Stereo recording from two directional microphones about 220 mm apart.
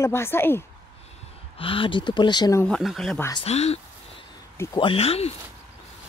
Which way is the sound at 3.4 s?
30° left (ahead or behind).